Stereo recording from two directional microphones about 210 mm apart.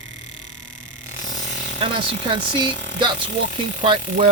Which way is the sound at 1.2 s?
40° left (ahead or behind).